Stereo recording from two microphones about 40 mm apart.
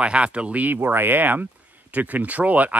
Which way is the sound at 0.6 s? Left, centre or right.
Right.